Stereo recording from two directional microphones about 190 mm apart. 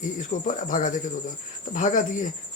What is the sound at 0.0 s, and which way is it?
Speech, 45° left (ahead or behind).